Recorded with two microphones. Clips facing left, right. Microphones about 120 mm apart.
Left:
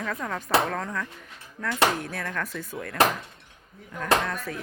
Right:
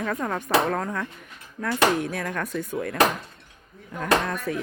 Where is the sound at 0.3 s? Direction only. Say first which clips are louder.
Right 1 dB; 20° right (ahead or behind).